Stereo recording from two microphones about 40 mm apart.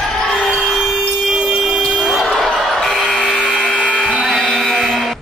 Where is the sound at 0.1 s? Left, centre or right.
Centre.